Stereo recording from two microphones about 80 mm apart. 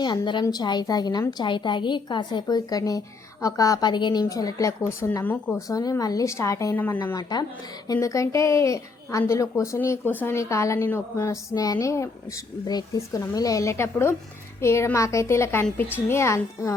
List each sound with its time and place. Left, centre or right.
0.5 s a woman's voice: left
1.3 s a woman's voice: left
4.3 s speech: left
4.8 s speech: left
5.5 s speech: left
6.7 s speech: left
7.2 s a woman's voice: left
7.9 s speech: left
10.0 s speech: left
10.3 s speech: left
11.5 s speech: left